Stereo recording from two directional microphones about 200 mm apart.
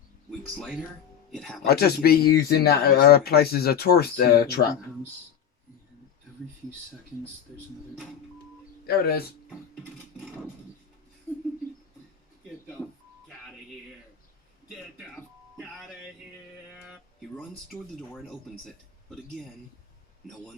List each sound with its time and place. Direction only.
0.3 s speech: centre (ahead or behind)
1.6 s speech: 50° left (ahead or behind)
8.9 s speech: 50° left (ahead or behind)
15.1 s music: 5° right (ahead or behind)
16.8 s a sound: 5° right (ahead or behind)
18.1 s speech: 5° left (ahead or behind)